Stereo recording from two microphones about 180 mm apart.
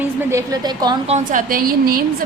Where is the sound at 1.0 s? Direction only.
40° right (ahead or behind).